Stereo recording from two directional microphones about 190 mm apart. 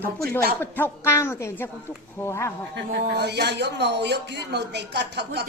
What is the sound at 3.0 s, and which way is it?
Speech, 60° right (ahead or behind).